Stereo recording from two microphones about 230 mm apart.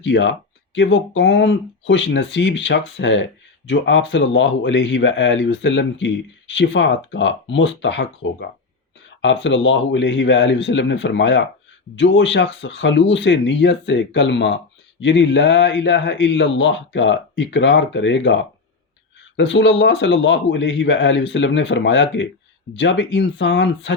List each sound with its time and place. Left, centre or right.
0.0 s a man's voice: left
19.4 s a man's voice: left